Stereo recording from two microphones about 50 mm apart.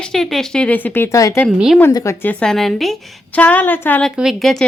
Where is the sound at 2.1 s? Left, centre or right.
Left.